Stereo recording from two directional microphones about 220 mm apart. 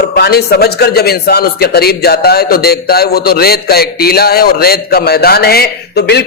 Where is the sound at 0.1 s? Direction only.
45° left (ahead or behind).